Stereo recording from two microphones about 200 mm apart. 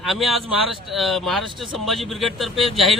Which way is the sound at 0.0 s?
Centre (ahead or behind).